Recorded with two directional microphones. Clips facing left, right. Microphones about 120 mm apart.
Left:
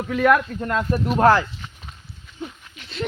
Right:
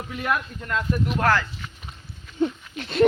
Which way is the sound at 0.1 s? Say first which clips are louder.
Left 9 dB; 80° left.